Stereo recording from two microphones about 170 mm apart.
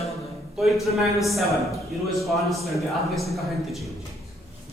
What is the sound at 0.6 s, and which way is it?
Speech, centre (ahead or behind).